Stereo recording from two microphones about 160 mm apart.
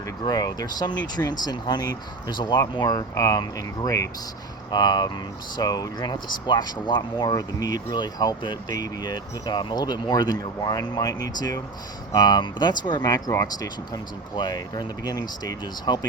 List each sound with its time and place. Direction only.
0.3 s speech: 25° left (ahead or behind)